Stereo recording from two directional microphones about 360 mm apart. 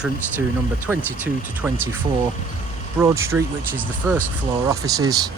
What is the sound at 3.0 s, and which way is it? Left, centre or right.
Speech, centre.